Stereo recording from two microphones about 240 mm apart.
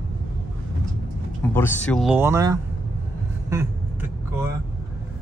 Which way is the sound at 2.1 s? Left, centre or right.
Centre.